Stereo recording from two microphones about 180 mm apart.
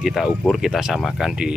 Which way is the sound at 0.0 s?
Centre (ahead or behind).